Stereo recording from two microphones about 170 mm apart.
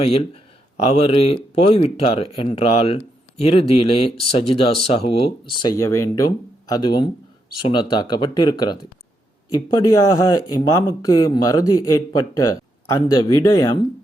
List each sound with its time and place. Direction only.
0.0 s speech: 35° left (ahead or behind)
5.6 s a man's voice: 20° left (ahead or behind)